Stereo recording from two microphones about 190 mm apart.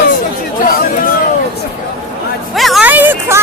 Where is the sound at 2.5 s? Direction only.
Centre (ahead or behind).